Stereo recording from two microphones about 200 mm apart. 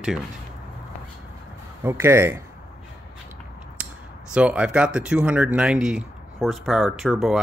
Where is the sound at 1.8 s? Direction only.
10° right (ahead or behind).